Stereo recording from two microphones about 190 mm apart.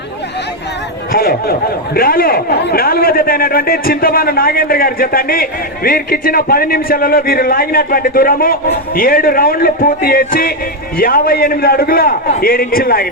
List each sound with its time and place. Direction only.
1.1 s speech: 50° left (ahead or behind)